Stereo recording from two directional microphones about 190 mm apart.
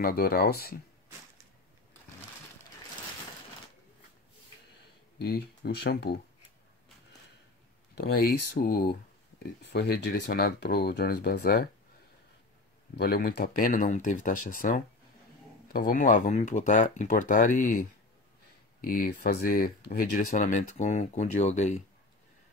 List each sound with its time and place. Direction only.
0.0 s speech: 50° left (ahead or behind)
5.2 s speech: 55° left (ahead or behind)
8.0 s speech: 50° left (ahead or behind)
12.9 s speech: 55° left (ahead or behind); by 21.8 s 35° left (ahead or behind)